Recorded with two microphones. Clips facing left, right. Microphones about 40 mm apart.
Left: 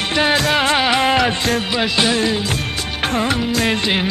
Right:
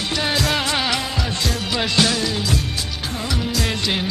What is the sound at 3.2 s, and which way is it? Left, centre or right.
Music of bollywood, left.